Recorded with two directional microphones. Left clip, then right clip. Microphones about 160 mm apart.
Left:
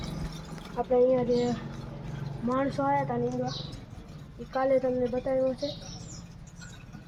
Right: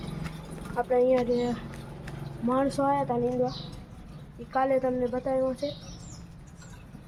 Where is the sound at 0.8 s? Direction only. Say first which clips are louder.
Even; 45° right (ahead or behind).